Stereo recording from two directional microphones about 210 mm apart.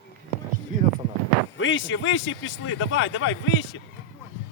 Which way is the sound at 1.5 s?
65° left (ahead or behind).